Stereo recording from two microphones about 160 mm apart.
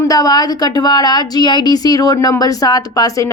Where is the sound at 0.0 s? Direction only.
20° left (ahead or behind).